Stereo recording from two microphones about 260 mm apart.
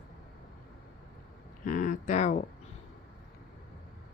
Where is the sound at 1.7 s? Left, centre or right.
Left.